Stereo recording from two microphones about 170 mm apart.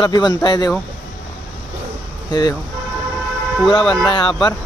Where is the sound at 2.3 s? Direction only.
25° left (ahead or behind).